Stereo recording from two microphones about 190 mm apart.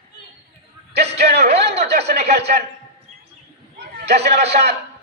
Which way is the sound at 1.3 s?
35° right (ahead or behind).